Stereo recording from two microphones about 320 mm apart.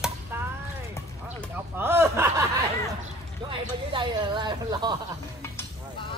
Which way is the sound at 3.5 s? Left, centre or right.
Centre.